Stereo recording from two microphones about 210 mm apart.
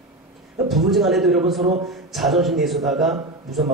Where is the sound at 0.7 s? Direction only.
Centre (ahead or behind).